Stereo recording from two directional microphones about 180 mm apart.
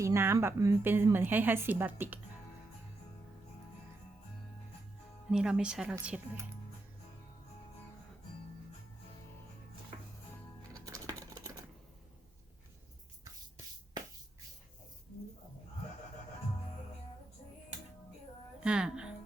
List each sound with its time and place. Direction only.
0.0 s a woman's voice: 15° right (ahead or behind)
5.3 s speech: 5° right (ahead or behind)
10.8 s scissors: 20° right (ahead or behind)
18.6 s speech: 5° right (ahead or behind)